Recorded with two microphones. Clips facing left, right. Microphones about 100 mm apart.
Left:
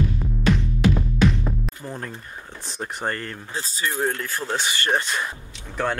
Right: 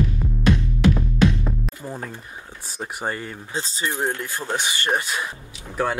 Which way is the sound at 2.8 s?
10° right (ahead or behind).